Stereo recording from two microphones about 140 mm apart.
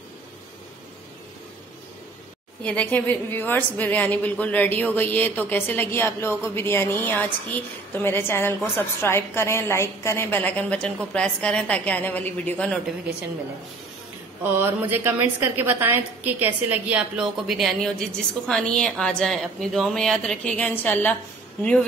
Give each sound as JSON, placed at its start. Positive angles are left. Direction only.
{"t": 2.6, "sound": "a woman's voice", "side_deg": 10}
{"t": 14.4, "sound": "a woman's voice", "side_deg": -15}